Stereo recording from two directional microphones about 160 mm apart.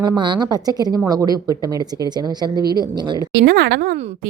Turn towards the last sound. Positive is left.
turn(degrees=-70)  # may be behind; listen again after turning